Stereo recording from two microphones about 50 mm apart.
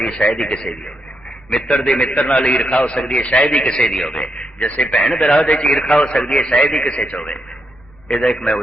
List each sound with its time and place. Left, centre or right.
0.2 s a man's voice: centre
2.0 s a man's voice: left
4.1 s a man's voice: left
8.1 s a man's voice: centre